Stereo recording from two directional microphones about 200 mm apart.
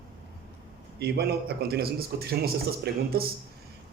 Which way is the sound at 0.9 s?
55° right (ahead or behind).